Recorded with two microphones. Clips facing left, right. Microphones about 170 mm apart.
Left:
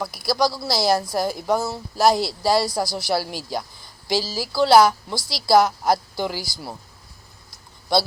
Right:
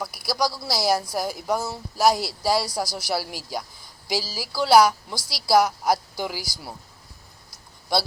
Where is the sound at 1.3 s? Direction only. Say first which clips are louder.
Left 4 dB; 25° left (ahead or behind).